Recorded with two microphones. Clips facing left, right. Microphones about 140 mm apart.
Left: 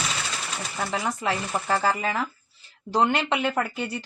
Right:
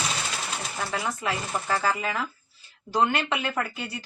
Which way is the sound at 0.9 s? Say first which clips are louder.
Left 3 dB; 20° left (ahead or behind).